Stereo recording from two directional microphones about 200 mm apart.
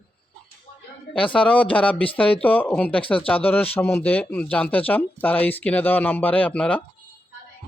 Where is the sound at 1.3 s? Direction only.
5° left (ahead or behind).